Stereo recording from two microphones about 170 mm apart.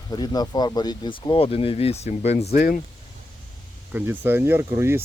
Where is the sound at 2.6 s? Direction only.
60° left (ahead or behind).